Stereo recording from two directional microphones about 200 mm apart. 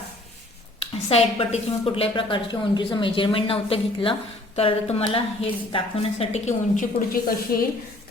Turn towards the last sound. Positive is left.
turn(degrees=50)  # may be behind; listen again after turning